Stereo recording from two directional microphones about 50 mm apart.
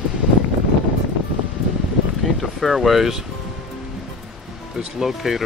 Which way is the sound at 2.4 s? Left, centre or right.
Centre.